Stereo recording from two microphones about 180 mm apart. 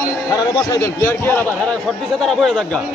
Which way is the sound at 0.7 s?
15° left (ahead or behind).